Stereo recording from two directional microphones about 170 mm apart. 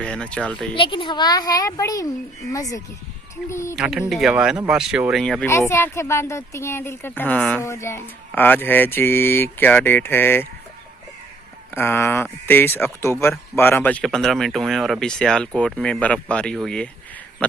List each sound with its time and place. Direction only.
0.0 s speech: 5° left (ahead or behind)
0.8 s a woman's voice: 30° left (ahead or behind)
3.8 s speech: 5° right (ahead or behind)
5.5 s a woman's voice: 15° left (ahead or behind)
11.7 s a woman's voice: 15° left (ahead or behind)